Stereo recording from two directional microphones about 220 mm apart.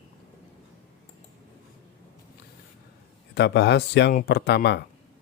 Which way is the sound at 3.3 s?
50° left (ahead or behind).